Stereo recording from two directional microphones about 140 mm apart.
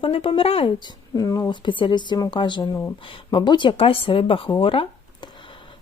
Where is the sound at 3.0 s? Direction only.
35° left (ahead or behind).